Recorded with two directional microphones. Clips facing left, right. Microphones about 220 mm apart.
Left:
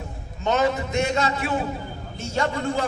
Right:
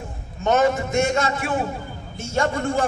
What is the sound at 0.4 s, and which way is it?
A man's voice, 50° right (ahead or behind).